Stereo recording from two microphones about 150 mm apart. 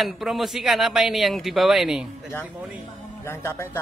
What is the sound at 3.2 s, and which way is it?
Speech, 15° left (ahead or behind).